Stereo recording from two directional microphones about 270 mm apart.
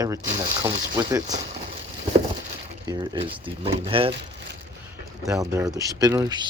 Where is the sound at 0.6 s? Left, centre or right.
Centre.